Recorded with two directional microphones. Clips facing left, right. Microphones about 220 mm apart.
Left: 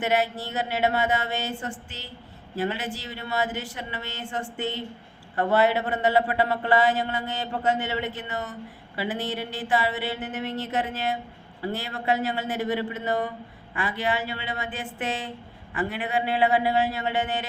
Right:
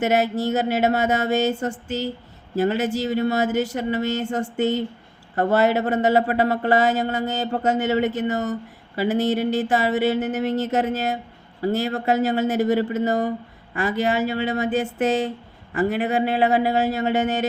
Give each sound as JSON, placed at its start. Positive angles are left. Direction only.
{"t": 0.0, "sound": "speech", "side_deg": -45}